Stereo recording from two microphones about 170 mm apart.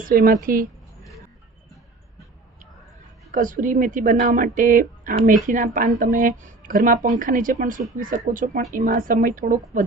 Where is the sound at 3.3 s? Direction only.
50° right (ahead or behind).